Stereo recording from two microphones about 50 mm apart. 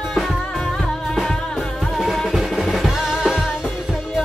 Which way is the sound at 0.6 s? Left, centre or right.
Centre.